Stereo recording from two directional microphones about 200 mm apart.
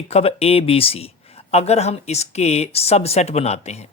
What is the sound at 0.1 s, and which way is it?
Speech, 30° left (ahead or behind).